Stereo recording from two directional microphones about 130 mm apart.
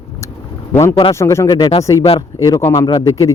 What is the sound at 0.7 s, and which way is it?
Speech, 20° left (ahead or behind).